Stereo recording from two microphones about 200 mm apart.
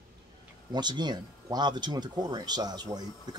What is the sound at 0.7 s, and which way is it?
Speech, 20° right (ahead or behind).